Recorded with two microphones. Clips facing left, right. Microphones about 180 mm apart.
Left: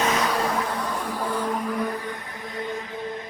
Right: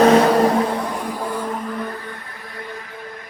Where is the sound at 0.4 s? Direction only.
30° right (ahead or behind).